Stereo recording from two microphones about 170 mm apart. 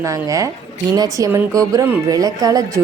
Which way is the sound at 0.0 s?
20° right (ahead or behind).